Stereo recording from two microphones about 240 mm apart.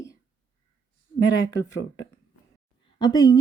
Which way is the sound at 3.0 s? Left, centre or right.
Centre.